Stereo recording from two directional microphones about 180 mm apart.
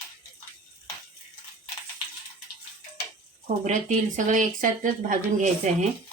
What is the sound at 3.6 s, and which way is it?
Speech, 45° right (ahead or behind).